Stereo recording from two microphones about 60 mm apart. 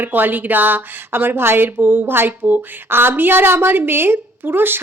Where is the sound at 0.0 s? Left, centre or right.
Right.